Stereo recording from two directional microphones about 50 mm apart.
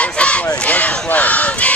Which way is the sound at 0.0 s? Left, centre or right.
Left.